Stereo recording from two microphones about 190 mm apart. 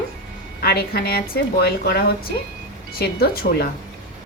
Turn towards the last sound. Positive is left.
turn(degrees=55)  # may be behind; listen again after turning